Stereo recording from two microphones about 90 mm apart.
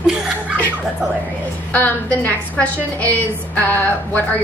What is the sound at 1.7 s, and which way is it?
A woman's voice, 20° left (ahead or behind).